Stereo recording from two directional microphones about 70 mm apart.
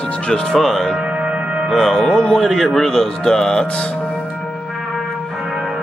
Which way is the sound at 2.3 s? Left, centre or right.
Centre.